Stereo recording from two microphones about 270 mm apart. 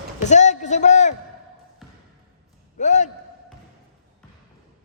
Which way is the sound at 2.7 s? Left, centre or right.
Left.